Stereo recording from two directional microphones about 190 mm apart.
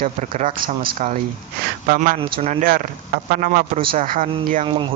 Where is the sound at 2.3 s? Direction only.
35° right (ahead or behind).